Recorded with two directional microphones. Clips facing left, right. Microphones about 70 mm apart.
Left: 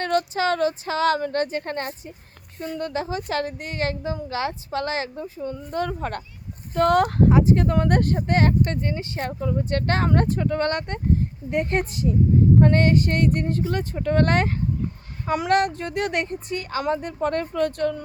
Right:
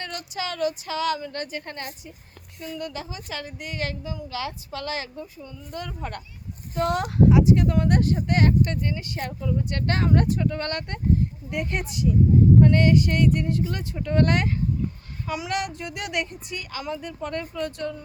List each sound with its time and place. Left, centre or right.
0.0 s a woman's voice: left